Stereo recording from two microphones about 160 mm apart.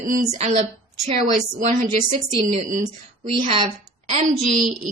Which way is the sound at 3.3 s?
35° right (ahead or behind).